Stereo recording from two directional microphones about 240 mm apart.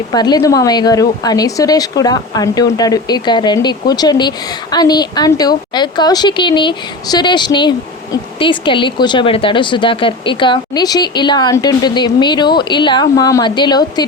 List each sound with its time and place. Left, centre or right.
0.1 s speech: centre